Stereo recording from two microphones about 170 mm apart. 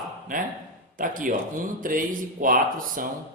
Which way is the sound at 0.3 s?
50° right (ahead or behind).